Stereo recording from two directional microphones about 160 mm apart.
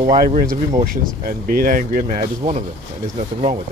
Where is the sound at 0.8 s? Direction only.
65° right (ahead or behind); by 3.6 s 40° right (ahead or behind).